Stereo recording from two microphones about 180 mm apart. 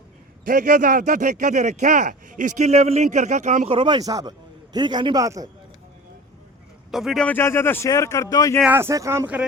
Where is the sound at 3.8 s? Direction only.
25° right (ahead or behind).